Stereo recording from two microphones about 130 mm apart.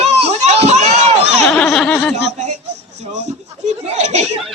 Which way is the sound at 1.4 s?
5° left (ahead or behind).